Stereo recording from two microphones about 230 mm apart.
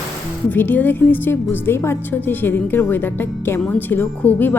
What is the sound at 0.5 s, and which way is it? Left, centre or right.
Speech, centre.